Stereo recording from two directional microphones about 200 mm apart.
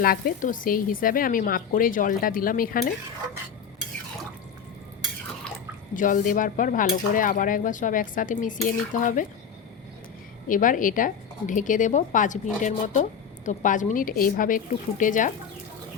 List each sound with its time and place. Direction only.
0.0 s speech: 45° left (ahead or behind)
5.9 s speech: 40° left (ahead or behind)
10.5 s speech: 40° left (ahead or behind)